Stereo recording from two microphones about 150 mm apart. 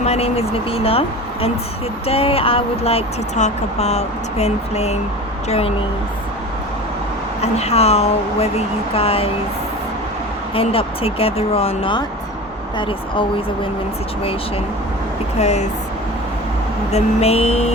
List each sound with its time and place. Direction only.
0.0 s speech: 45° left (ahead or behind)
7.4 s speech: 45° left (ahead or behind)
10.5 s speech: 40° left (ahead or behind)
15.4 s speech: 50° left (ahead or behind)
16.9 s speech: 45° left (ahead or behind)